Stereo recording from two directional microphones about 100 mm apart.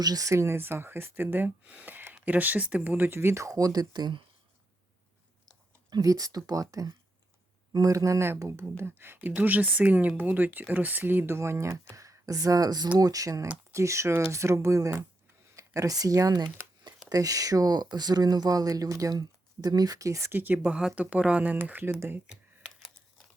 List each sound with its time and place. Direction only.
0.0 s speech: 35° right (ahead or behind)
5.9 s speech: 35° right (ahead or behind); by 21.9 s 20° right (ahead or behind)
22.3 s computer keyboard: 5° right (ahead or behind)